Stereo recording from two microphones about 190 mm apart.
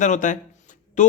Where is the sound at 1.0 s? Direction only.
40° left (ahead or behind).